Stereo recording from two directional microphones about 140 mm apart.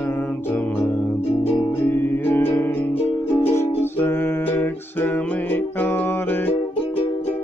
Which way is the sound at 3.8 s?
15° left (ahead or behind).